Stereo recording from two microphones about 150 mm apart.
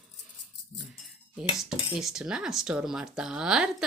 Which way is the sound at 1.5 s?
5° right (ahead or behind).